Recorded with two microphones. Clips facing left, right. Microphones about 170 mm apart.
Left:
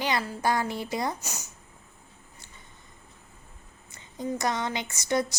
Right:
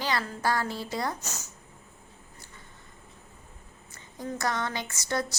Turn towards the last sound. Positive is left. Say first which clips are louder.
# left 4 dB
turn(degrees=20)  # may be behind; listen again after turning